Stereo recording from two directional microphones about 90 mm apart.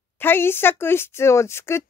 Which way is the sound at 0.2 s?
25° left (ahead or behind).